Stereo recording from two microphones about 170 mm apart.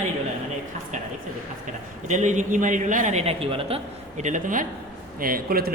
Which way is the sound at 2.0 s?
45° right (ahead or behind).